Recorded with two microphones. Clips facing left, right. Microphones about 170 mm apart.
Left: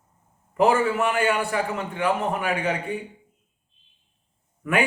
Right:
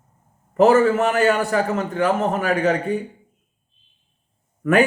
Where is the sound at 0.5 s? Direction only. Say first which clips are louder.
Right 6 dB; 40° right (ahead or behind).